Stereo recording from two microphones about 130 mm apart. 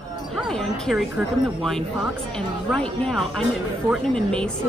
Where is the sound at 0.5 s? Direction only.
5° left (ahead or behind).